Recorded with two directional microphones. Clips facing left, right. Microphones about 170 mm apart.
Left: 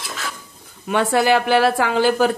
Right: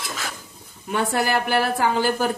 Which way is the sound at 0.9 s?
90° left.